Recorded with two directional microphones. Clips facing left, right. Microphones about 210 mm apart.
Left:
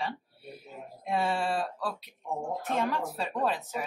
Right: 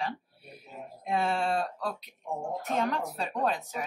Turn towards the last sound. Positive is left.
turn(degrees=5)  # may be behind; listen again after turning